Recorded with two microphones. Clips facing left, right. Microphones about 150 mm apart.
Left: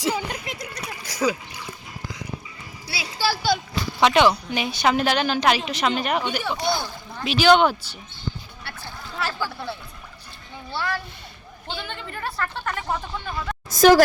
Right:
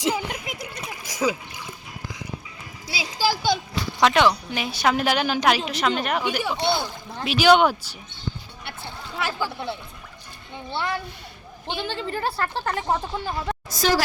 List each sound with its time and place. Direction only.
0.0 s a sound: 15° right (ahead or behind)
2.8 s a sound: 90° right
3.1 s speech: 15° right (ahead or behind)
4.0 s a woman's voice: centre (ahead or behind)
6.6 s speech: 25° right (ahead or behind)
7.3 s speech: 10° right (ahead or behind)
9.1 s a child's voice: 15° right (ahead or behind); by 13.6 s 30° right (ahead or behind)
13.7 s a woman's voice: 50° left (ahead or behind)